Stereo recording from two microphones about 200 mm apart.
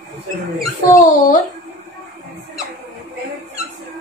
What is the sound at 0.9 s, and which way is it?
Speech, 40° left (ahead or behind).